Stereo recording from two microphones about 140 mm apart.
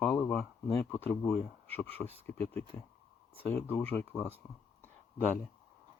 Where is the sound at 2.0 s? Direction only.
10° left (ahead or behind).